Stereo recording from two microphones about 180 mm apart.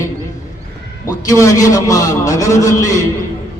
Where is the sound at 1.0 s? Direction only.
15° left (ahead or behind).